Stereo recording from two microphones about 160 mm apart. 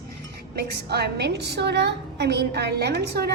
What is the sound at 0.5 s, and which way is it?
A woman's voice, 90° right.